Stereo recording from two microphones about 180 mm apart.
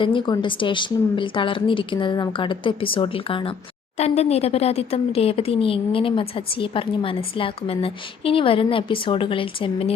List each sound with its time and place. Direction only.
0.0 s a woman's voice: 25° left (ahead or behind)